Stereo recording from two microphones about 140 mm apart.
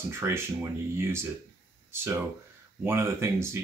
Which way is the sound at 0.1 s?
20° right (ahead or behind).